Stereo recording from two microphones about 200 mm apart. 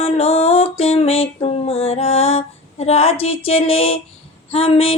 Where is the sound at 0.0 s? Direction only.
30° left (ahead or behind).